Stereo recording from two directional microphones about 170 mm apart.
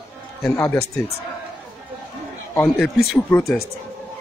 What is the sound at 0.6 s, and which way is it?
Speech, 15° left (ahead or behind).